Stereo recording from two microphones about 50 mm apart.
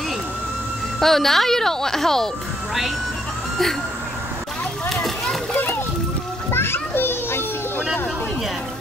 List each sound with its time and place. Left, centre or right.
0.9 s speech: centre
4.8 s a sound: centre
6.5 s children playing: left